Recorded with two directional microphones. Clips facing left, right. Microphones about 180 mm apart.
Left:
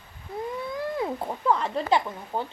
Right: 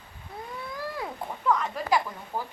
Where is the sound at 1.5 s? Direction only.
30° left (ahead or behind).